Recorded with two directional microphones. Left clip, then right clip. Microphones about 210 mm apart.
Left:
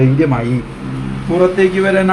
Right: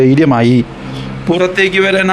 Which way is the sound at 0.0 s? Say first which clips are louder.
Right 5 dB; 50° right (ahead or behind).